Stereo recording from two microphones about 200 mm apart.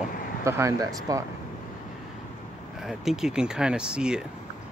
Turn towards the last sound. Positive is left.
turn(degrees=-5)  # may be behind; listen again after turning